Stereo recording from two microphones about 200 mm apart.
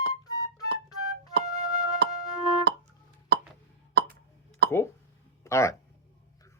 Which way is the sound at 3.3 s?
55° right (ahead or behind).